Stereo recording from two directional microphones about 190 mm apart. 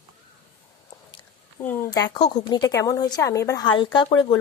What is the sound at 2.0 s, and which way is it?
Speech, 20° left (ahead or behind).